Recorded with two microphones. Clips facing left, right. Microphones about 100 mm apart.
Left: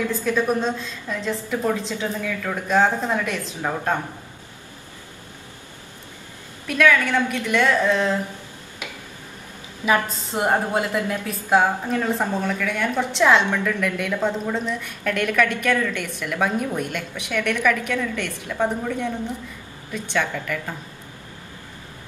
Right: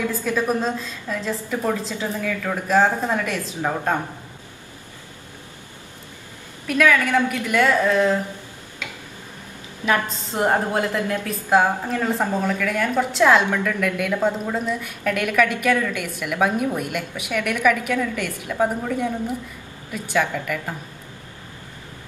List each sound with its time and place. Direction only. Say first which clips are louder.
0.1 s a woman's voice: left 1 dB; 5° right (ahead or behind)
6.7 s a woman's voice: right 1 dB; 5° right (ahead or behind)
9.8 s a woman's voice: left 1 dB; 15° left (ahead or behind); by 20.7 s 5° right (ahead or behind)